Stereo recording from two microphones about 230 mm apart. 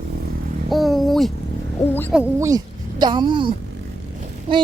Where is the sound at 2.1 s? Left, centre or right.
Centre.